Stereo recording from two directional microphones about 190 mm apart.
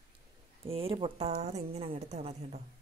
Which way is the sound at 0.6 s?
30° right (ahead or behind).